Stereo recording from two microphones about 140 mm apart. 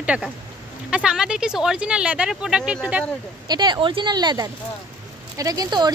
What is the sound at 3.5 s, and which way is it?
Speech, 30° right (ahead or behind).